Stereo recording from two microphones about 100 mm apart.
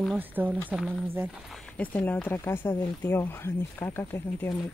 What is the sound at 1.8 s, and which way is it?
Speech, 15° left (ahead or behind).